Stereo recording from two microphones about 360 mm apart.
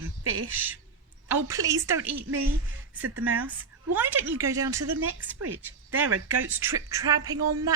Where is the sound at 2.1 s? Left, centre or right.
Right.